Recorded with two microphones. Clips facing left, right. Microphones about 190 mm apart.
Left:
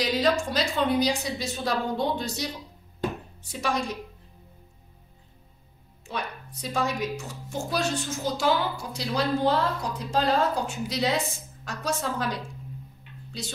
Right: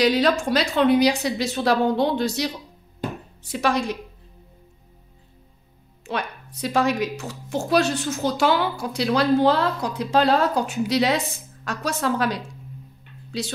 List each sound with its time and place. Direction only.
0.0 s a woman's voice: 75° right (ahead or behind)
6.0 s a woman's voice: 75° right (ahead or behind)